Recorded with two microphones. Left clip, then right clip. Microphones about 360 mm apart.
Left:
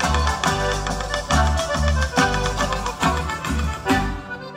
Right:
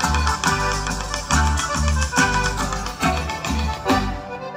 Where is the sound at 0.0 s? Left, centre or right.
Left.